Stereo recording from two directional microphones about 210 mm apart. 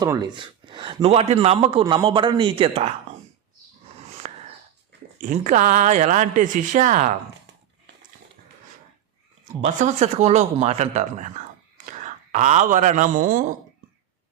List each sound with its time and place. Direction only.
0.0 s a man's voice: 20° right (ahead or behind)
4.2 s wheeze: 35° right (ahead or behind)
5.2 s speech: 40° right (ahead or behind)
9.5 s speech: 35° right (ahead or behind)